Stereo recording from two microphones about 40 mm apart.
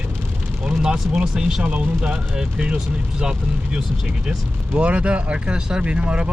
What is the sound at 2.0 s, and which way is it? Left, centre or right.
Speech, right.